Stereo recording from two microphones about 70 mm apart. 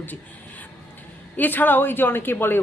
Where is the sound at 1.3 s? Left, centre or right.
Left.